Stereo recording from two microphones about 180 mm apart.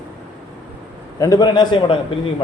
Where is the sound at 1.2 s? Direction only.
20° left (ahead or behind).